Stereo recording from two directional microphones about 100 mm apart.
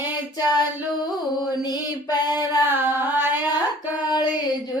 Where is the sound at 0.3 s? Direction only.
40° left (ahead or behind).